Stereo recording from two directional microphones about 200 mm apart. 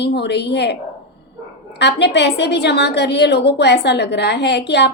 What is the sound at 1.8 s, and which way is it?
A woman's voice, 60° left (ahead or behind).